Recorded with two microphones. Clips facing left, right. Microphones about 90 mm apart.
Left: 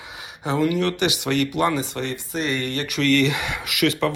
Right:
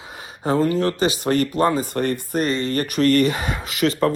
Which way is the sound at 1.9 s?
50° right (ahead or behind).